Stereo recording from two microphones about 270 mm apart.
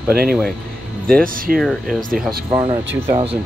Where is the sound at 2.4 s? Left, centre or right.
Centre.